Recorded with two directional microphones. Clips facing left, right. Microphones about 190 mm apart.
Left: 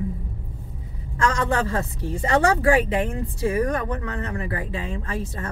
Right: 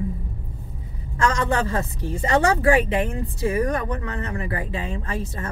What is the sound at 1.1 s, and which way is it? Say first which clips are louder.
A woman's voice: right 1 dB; 20° right (ahead or behind).